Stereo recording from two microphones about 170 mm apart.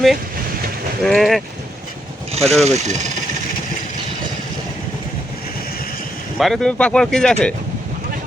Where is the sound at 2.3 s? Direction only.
40° right (ahead or behind).